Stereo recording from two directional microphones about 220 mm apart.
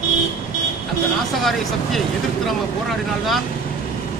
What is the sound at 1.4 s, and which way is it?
Speech, centre (ahead or behind).